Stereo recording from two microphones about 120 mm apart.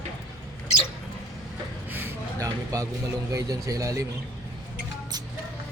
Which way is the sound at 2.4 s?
30° right (ahead or behind).